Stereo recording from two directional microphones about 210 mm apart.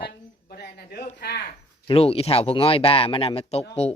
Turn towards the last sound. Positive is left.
turn(degrees=30)  # may be behind; listen again after turning